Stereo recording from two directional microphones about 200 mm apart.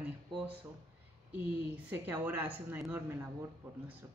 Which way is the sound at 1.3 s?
10° right (ahead or behind).